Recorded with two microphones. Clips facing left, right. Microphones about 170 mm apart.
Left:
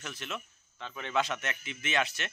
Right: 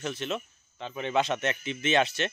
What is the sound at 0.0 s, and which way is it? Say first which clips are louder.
Speech: right 8 dB; 25° right (ahead or behind).